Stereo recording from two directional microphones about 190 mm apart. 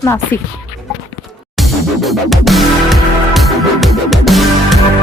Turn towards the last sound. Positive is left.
turn(degrees=0)  # may be behind; listen again after turning